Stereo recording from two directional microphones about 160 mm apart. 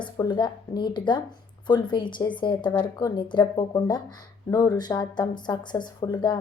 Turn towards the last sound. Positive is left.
turn(degrees=30)  # may be behind; listen again after turning